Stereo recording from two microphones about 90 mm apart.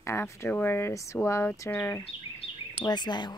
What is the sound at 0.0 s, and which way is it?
Speech, 30° left (ahead or behind).